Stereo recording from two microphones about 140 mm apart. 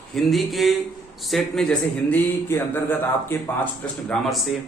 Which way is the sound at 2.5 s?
15° left (ahead or behind).